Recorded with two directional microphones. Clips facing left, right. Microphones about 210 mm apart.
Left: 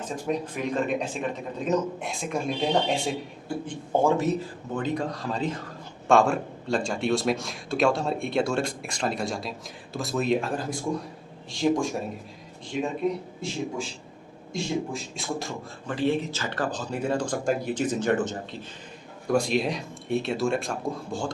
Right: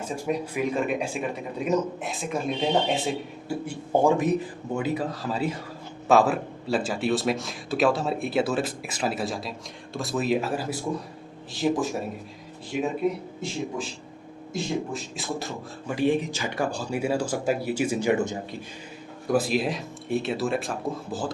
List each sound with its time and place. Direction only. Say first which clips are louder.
0.0 s speech: right 1 dB; 10° right (ahead or behind)
3.7 s speech: right 2 dB; 15° right (ahead or behind)
14.5 s speech: even; 5° right (ahead or behind)
16.0 s speech: right 2 dB; 15° right (ahead or behind)